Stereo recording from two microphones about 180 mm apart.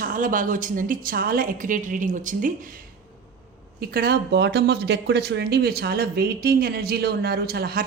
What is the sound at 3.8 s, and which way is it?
Speech, 60° right (ahead or behind).